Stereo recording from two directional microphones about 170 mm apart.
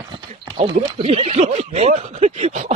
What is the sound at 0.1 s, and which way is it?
Speech, 30° right (ahead or behind).